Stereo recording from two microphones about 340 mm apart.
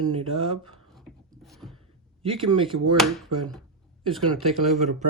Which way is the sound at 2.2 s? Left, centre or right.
Centre.